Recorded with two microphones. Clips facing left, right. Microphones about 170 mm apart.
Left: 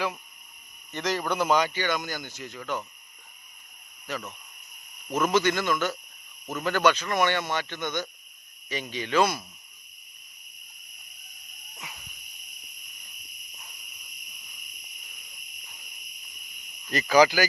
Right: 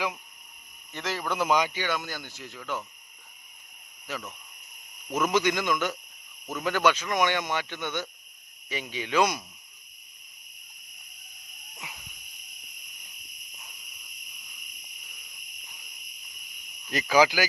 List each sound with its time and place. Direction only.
0.9 s speech: centre (ahead or behind)
5.1 s speech: 10° right (ahead or behind)
16.8 s speech: 10° right (ahead or behind)